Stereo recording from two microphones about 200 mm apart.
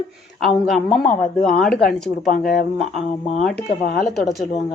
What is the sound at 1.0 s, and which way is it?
Speech, 40° left (ahead or behind).